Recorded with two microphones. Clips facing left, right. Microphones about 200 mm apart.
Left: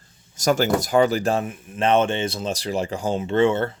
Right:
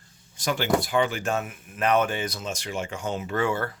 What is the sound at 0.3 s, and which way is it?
Speech, 45° left (ahead or behind).